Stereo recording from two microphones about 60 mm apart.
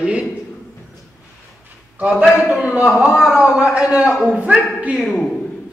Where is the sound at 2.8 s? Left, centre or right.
Centre.